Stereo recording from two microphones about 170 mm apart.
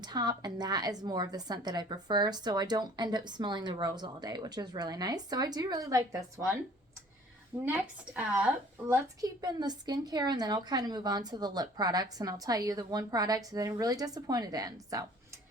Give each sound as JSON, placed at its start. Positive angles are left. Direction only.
{"t": 0.0, "sound": "a woman's voice", "side_deg": -25}
{"t": 7.6, "sound": "speech", "side_deg": -10}
{"t": 8.9, "sound": "a woman's voice", "side_deg": -20}